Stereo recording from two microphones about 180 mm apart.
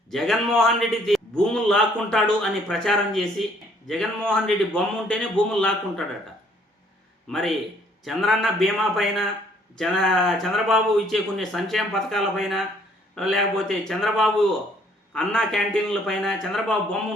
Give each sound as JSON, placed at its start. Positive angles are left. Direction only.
{"t": 0.1, "sound": "a man's voice", "side_deg": 0}
{"t": 7.3, "sound": "a man's voice", "side_deg": 0}